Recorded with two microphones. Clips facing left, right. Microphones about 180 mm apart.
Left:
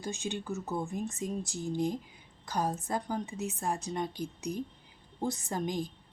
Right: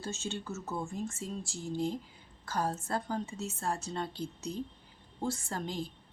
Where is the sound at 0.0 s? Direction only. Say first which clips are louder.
Left 2 dB; 15° left (ahead or behind).